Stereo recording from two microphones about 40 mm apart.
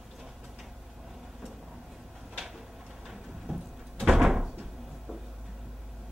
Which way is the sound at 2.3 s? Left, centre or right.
Centre.